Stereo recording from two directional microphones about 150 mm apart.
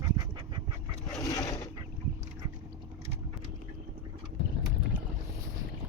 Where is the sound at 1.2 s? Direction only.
25° left (ahead or behind).